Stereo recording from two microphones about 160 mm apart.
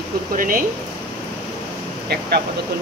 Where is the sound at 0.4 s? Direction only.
60° right (ahead or behind).